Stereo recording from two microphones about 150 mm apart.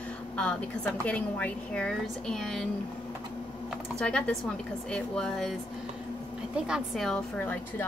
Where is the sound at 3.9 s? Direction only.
5° left (ahead or behind).